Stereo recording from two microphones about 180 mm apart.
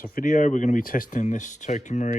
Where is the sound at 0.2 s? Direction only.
45° left (ahead or behind).